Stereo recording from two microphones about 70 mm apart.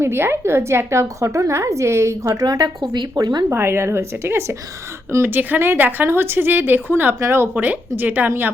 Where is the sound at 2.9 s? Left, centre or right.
Right.